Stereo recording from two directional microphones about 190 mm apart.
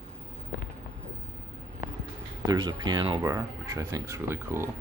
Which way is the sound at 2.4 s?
20° right (ahead or behind).